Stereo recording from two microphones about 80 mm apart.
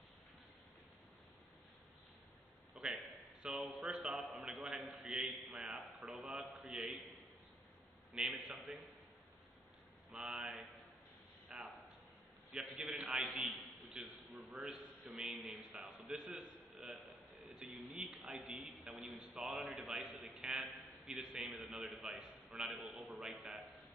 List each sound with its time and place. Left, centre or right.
2.7 s a man's voice: centre
8.1 s a man's voice: centre
10.1 s a man's voice: centre
11.5 s a sound: centre
12.5 s a man's voice: centre
16.7 s a sound: centre
18.9 s a man's voice: centre